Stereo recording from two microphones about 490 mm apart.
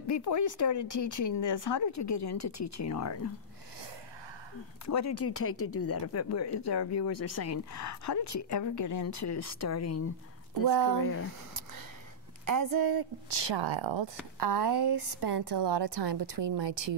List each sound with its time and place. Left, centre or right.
0.0 s speech: left
4.8 s speech: left
10.7 s speech: right
12.4 s a woman's voice: right